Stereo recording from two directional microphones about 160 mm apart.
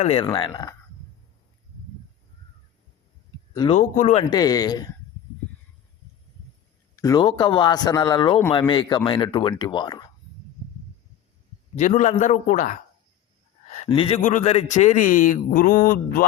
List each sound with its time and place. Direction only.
0.0 s speech: 40° left (ahead or behind)
0.3 s speech: 25° left (ahead or behind)
3.7 s a man's voice: 50° left (ahead or behind)
4.2 s speech: 25° left (ahead or behind)
6.9 s speech: 20° left (ahead or behind)
11.8 s a man's voice: 50° left (ahead or behind)
13.7 s a sound: 40° left (ahead or behind)
14.2 s a man's voice: 55° left (ahead or behind)